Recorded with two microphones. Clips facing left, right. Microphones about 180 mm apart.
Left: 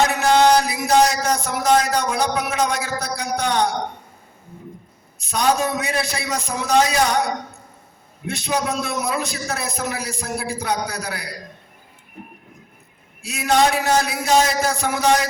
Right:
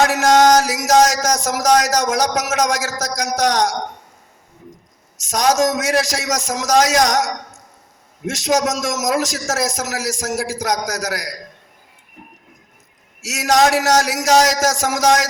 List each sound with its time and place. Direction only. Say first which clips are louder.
0.0 s music: right 3 dB; 90° right
5.1 s music: right 3 dB; 90° right
13.2 s music: right 2 dB; 90° right